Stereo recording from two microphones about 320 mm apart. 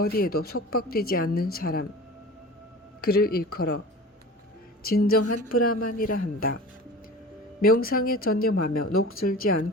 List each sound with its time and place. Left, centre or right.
0.0 s speech: left
3.0 s speech: left
4.8 s a woman's voice: left
7.6 s speech: left